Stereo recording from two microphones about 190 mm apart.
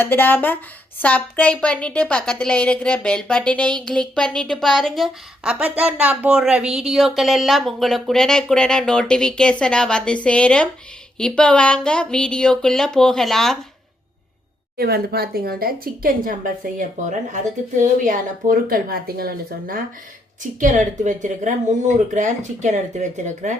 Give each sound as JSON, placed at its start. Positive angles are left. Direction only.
{"t": 0.0, "sound": "speech", "side_deg": 10}
{"t": 14.8, "sound": "a woman's voice", "side_deg": -55}